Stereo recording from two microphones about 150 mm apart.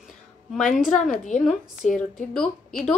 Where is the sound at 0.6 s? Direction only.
60° left (ahead or behind).